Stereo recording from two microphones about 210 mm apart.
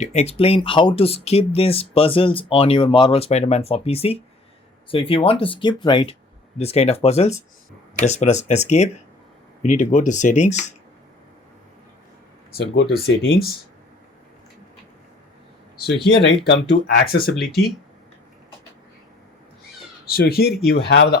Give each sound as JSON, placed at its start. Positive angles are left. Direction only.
{"t": 0.0, "sound": "speech", "side_deg": 30}
{"t": 12.5, "sound": "speech", "side_deg": 50}
{"t": 16.5, "sound": "speech", "side_deg": 50}
{"t": 20.1, "sound": "speech", "side_deg": 45}